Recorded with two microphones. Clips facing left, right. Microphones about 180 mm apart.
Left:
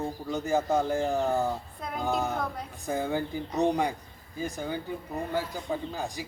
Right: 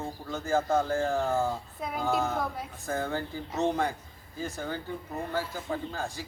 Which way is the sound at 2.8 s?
15° left (ahead or behind).